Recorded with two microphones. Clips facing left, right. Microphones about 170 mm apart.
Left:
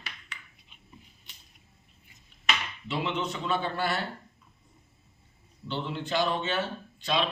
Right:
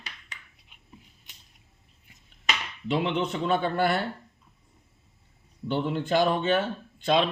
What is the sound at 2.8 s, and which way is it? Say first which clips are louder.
Speech: right 5 dB; 55° right (ahead or behind).